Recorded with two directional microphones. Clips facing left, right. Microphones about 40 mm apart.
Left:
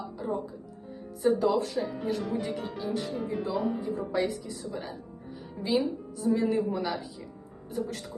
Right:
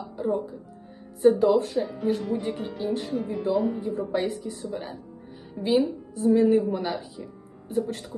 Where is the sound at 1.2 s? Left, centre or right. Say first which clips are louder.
Right 6 dB; right.